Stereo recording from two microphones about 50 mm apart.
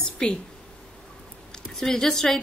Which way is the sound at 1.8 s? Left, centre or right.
Centre.